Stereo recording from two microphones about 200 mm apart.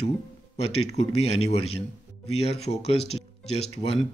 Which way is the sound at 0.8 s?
30° left (ahead or behind).